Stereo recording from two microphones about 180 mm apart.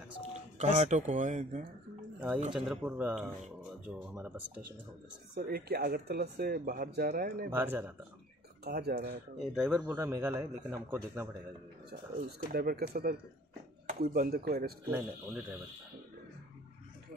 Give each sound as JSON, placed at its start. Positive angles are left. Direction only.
{"t": 0.6, "sound": "speech", "side_deg": -40}
{"t": 2.1, "sound": "speech", "side_deg": -10}
{"t": 5.3, "sound": "speech", "side_deg": -60}
{"t": 7.5, "sound": "speech", "side_deg": -10}
{"t": 8.6, "sound": "speech", "side_deg": -65}
{"t": 9.4, "sound": "speech", "side_deg": -5}
{"t": 12.5, "sound": "speech", "side_deg": -55}
{"t": 14.9, "sound": "speech", "side_deg": -5}